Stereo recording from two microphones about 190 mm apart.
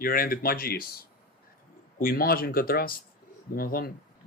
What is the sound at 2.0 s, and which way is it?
Speech, 50° left (ahead or behind).